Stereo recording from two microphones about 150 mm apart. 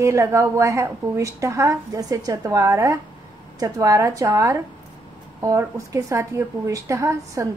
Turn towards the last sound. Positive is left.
turn(degrees=-20)  # may be behind; listen again after turning